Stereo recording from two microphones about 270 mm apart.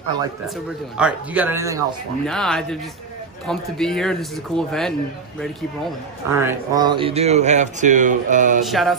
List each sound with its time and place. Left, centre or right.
0.9 s speech: centre
2.2 s a man's voice: centre
6.3 s speech: centre; by 8.6 s right
8.6 s a man's voice: centre